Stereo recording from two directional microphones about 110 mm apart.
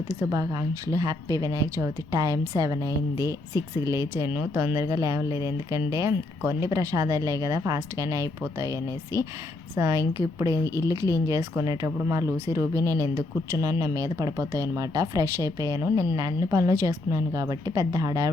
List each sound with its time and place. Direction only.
0.2 s speech: 30° right (ahead or behind)